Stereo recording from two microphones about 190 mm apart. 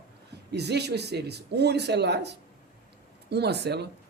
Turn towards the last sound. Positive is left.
turn(degrees=-60)  # may be behind; listen again after turning